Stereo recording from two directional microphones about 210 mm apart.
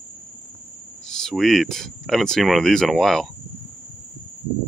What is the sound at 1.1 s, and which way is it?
Speech, centre (ahead or behind).